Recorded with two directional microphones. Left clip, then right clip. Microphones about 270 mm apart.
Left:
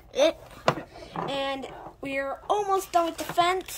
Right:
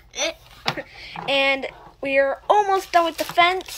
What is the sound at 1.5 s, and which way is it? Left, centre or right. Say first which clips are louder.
Speech: right 9 dB; centre.